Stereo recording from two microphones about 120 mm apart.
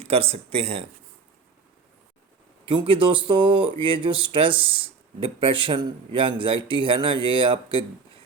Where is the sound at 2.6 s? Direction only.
45° right (ahead or behind).